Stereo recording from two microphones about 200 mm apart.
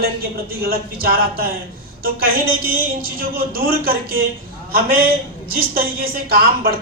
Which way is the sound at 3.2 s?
45° right (ahead or behind).